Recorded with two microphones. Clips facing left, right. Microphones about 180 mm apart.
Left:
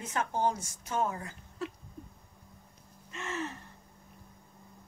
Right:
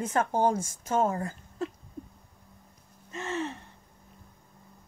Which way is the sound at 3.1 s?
30° right (ahead or behind).